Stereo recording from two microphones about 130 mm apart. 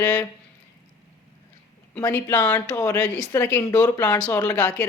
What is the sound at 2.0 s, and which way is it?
Speech, 20° left (ahead or behind).